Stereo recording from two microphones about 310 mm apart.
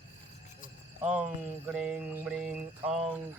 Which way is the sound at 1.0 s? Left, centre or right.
Centre.